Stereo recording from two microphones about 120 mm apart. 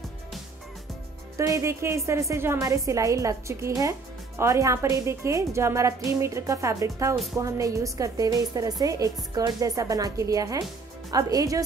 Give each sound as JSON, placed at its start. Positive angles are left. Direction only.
{"t": 1.3, "sound": "a woman's voice", "side_deg": -25}